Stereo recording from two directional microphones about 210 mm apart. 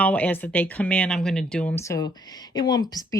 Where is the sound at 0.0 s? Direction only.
5° left (ahead or behind).